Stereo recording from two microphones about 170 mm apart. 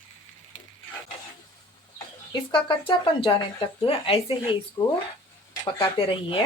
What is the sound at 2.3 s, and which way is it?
Speech, 30° left (ahead or behind).